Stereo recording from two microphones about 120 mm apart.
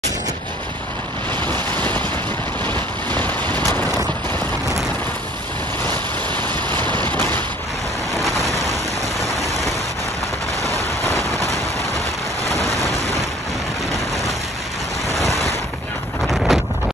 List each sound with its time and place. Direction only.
1.7 s vehicle: 15° left (ahead or behind)
7.0 s a sound: 15° left (ahead or behind)
8.2 s vehicle: 30° right (ahead or behind)
9.2 s rain: 30° right (ahead or behind)
11.1 s vehicle: 25° right (ahead or behind)
16.5 s wind noise: centre (ahead or behind)